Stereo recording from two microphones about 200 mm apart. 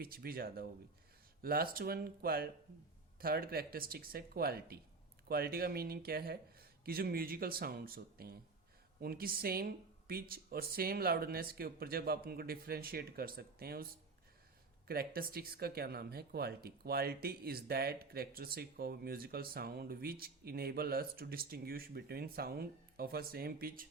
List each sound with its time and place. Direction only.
0.0 s speech: 50° right (ahead or behind)
14.8 s speech: 50° right (ahead or behind)